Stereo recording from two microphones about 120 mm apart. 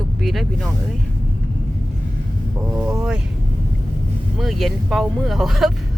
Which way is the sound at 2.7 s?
20° right (ahead or behind).